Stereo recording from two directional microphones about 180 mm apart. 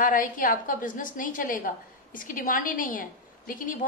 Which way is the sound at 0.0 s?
50° left (ahead or behind).